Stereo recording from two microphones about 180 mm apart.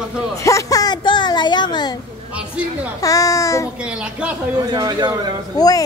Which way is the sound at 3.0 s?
20° left (ahead or behind).